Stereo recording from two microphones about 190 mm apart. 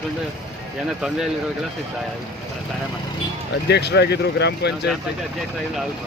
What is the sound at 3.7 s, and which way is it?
Speech, 60° left (ahead or behind).